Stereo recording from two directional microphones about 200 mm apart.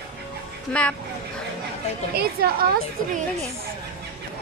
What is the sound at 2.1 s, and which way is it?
Speech, 50° right (ahead or behind).